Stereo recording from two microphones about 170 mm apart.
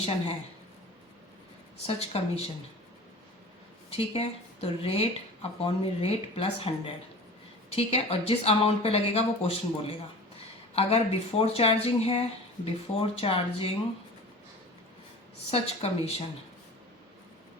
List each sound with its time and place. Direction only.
1.9 s speech: 35° left (ahead or behind)
3.8 s speech: 35° left (ahead or behind)
15.4 s speech: 35° left (ahead or behind)